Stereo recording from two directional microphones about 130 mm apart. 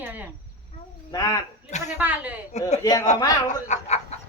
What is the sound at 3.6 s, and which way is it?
Cat, 60° left (ahead or behind).